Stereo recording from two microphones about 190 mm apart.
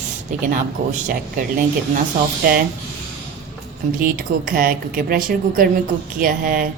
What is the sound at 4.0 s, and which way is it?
A woman's voice, 45° right (ahead or behind).